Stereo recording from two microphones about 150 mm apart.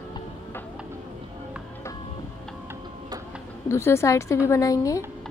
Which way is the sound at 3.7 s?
15° left (ahead or behind).